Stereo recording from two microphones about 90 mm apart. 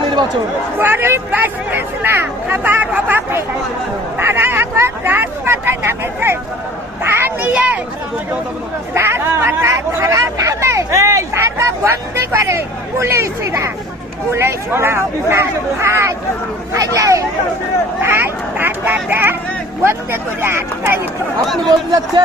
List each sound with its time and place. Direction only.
0.8 s speech: 25° right (ahead or behind)
7.0 s a sound: 25° right (ahead or behind)
9.0 s hubbub: 25° right (ahead or behind)
14.3 s speech: 30° right (ahead or behind)
18.0 s a sound: 25° right (ahead or behind)
19.8 s speech: 25° right (ahead or behind)
21.4 s speech: centre (ahead or behind)
21.7 s speech: 50° right (ahead or behind)